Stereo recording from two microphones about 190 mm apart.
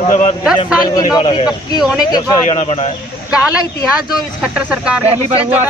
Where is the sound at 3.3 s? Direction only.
5° right (ahead or behind).